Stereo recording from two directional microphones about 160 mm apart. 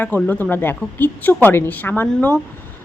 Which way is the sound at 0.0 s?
10° left (ahead or behind).